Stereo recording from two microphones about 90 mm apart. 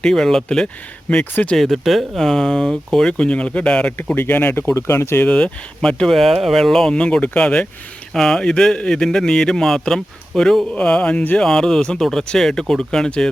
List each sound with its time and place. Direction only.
0.0 s a man's voice: 5° left (ahead or behind)
1.5 s speech: centre (ahead or behind)
3.9 s speech: 20° left (ahead or behind)
5.2 s a man's voice: 10° left (ahead or behind)